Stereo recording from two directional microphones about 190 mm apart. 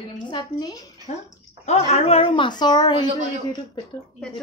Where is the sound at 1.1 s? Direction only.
40° left (ahead or behind); by 3.1 s 20° left (ahead or behind).